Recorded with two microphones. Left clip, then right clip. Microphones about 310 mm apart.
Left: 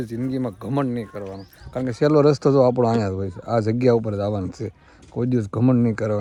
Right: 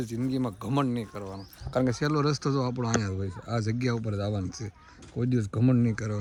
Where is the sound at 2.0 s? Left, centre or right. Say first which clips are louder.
Left 12 dB; centre.